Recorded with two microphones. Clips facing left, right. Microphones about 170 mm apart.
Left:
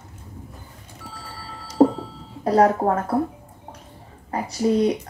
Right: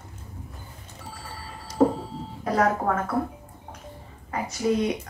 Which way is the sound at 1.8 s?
40° left (ahead or behind).